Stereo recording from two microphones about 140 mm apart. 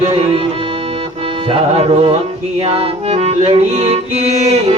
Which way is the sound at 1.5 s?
45° right (ahead or behind).